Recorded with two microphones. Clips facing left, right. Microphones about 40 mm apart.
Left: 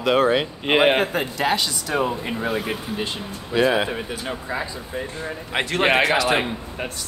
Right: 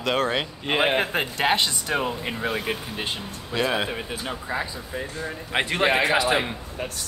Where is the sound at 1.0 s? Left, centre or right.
Right.